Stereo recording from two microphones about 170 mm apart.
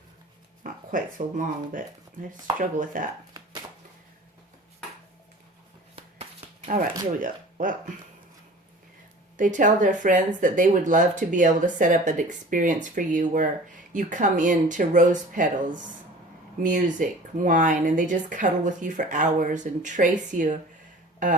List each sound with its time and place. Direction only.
0.6 s speech: 55° right (ahead or behind)
6.0 s a sound: 35° right (ahead or behind)
6.7 s speech: 55° right (ahead or behind)
9.4 s speech: 50° right (ahead or behind)